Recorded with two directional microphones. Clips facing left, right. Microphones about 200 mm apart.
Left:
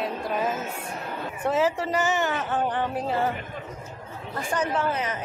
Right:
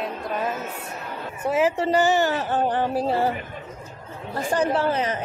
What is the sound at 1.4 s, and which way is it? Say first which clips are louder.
Speech: right 2 dB; 15° right (ahead or behind).